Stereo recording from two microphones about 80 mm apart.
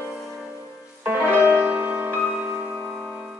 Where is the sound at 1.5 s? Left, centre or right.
Centre.